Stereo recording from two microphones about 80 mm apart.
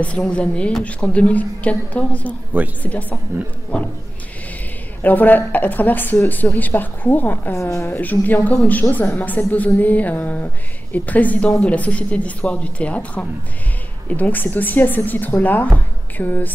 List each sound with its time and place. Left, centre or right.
0.0 s a woman's voice: centre
5.0 s a woman's voice: left
7.5 s a woman's voice: left